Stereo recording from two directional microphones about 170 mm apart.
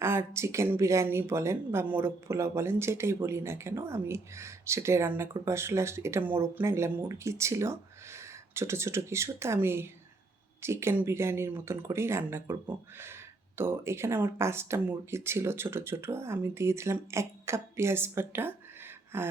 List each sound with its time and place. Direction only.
0.0 s speech: 15° right (ahead or behind)
13.6 s speech: 15° right (ahead or behind)